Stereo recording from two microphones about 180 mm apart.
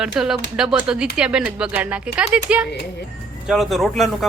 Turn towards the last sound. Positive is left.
turn(degrees=0)  # may be behind; listen again after turning